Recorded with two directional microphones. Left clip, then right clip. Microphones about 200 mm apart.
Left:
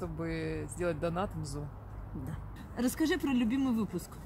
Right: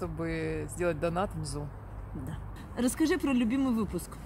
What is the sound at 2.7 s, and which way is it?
Speech, 5° left (ahead or behind).